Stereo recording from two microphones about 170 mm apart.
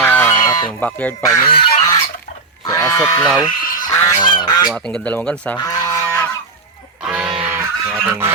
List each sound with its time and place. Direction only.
0.0 s fowl: 15° left (ahead or behind)
0.3 s fowl: 25° left (ahead or behind)
0.7 s speech: 5° left (ahead or behind)
1.2 s speech: 25° left (ahead or behind)
1.8 s fowl: 20° left (ahead or behind)
2.6 s speech: 20° left (ahead or behind)
3.6 s goose: 55° left (ahead or behind)
3.8 s goose: 20° left (ahead or behind)
4.3 s speech: 25° left (ahead or behind)
4.7 s speech: 5° left (ahead or behind)
5.5 s goose: 20° left (ahead or behind)
7.0 s music: centre (ahead or behind)